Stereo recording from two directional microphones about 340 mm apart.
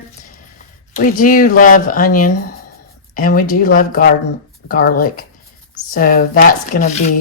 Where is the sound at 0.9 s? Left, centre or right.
Left.